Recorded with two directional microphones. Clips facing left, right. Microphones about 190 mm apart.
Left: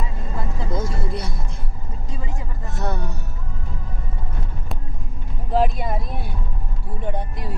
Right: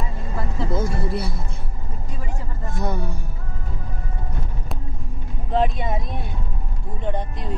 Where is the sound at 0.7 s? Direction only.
5° right (ahead or behind).